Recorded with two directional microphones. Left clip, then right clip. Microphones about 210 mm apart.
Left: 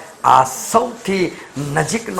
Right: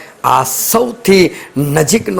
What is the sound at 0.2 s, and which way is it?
A man's voice, 50° right (ahead or behind).